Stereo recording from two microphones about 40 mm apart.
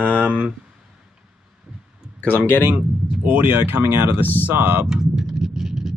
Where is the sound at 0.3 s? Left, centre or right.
Right.